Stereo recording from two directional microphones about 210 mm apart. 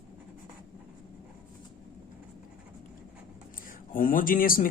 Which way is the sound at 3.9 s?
40° left (ahead or behind).